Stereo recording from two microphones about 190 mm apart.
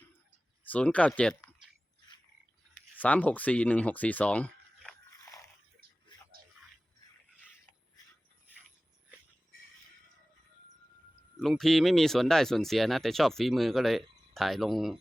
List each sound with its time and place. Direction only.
0.7 s speech: 5° left (ahead or behind)
3.0 s speech: 10° left (ahead or behind)
5.1 s biting: 15° left (ahead or behind)
11.3 s speech: centre (ahead or behind)